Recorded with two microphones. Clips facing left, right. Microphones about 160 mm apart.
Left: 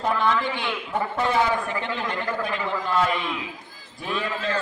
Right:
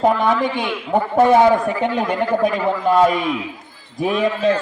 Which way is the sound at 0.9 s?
50° right (ahead or behind).